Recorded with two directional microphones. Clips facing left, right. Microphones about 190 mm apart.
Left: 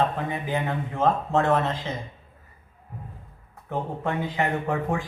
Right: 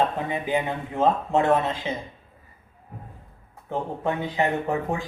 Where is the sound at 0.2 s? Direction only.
15° right (ahead or behind).